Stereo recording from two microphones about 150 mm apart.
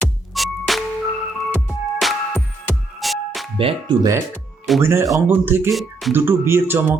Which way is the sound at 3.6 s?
40° right (ahead or behind).